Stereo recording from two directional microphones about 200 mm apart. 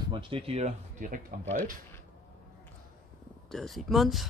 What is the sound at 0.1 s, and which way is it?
Speech, 25° right (ahead or behind).